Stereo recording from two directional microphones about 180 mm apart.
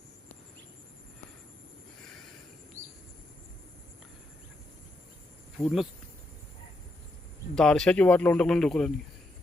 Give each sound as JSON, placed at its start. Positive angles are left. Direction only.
{"t": 2.8, "sound": "a sound", "side_deg": -15}
{"t": 5.5, "sound": "a man's voice", "side_deg": 0}
{"t": 7.5, "sound": "a man's voice", "side_deg": 5}